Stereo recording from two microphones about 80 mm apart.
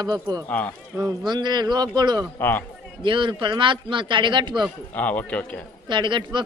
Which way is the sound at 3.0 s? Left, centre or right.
Right.